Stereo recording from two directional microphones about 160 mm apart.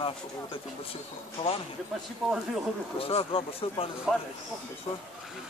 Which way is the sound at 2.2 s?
Centre (ahead or behind).